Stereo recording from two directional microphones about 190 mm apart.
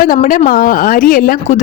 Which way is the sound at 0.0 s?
45° left (ahead or behind).